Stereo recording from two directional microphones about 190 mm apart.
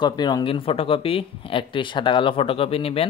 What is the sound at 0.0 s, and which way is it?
Speech, 20° left (ahead or behind).